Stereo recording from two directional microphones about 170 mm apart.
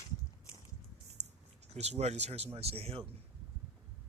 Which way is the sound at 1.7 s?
40° right (ahead or behind).